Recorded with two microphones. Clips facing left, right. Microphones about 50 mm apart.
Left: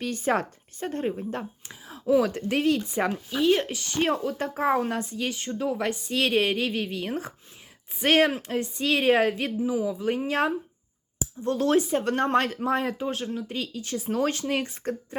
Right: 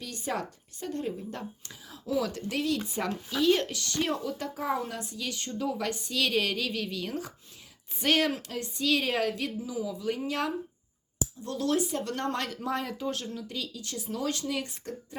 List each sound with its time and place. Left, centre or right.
0.0 s speech: left
3.9 s speech: left